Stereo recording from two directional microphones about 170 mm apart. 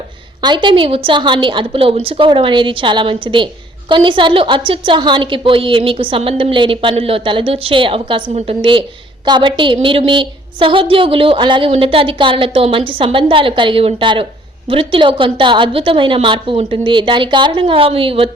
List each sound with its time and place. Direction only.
0.4 s a woman's voice: 25° right (ahead or behind)